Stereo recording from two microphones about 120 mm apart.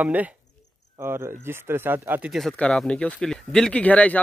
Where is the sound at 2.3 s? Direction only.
Centre (ahead or behind).